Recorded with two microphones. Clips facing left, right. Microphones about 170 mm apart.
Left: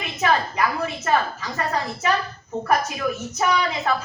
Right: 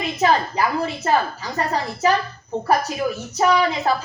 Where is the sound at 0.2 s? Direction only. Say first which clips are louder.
Right 2 dB; 35° right (ahead or behind).